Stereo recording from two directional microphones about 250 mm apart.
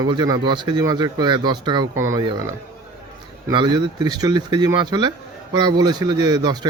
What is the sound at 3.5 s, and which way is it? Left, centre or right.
Speech, centre.